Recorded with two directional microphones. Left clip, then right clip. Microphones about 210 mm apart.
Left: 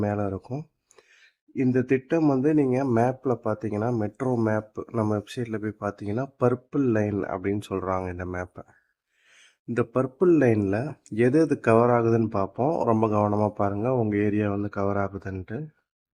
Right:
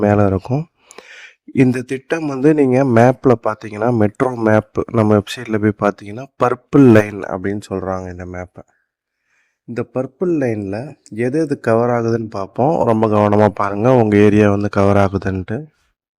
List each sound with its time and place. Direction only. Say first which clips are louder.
0.0 s a man's voice: right 14 dB; 50° right (ahead or behind)
0.3 s a sound: right 14 dB; 40° right (ahead or behind)
2.0 s a man's voice: right 7 dB; 45° right (ahead or behind); by 8.6 s 15° right (ahead or behind)
9.7 s a man's voice: right 3 dB; 20° right (ahead or behind); by 15.6 s 35° right (ahead or behind)